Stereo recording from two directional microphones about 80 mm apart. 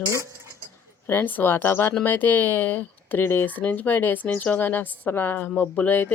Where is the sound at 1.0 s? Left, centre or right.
Left.